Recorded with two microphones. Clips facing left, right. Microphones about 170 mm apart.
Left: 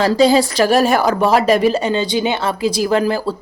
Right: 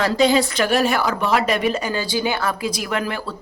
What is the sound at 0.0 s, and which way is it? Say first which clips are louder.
A woman's voice: left 4 dB; 35° left (ahead or behind).